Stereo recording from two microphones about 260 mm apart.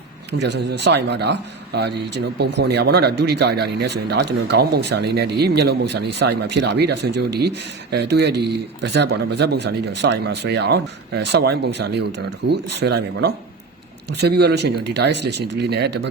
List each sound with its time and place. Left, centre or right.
0.3 s a man's voice: right